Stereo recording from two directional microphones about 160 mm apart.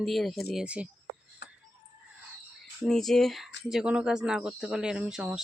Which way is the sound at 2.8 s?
5° left (ahead or behind).